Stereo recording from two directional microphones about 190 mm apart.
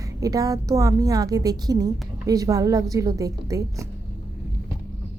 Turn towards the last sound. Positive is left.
turn(degrees=-15)  # may be behind; listen again after turning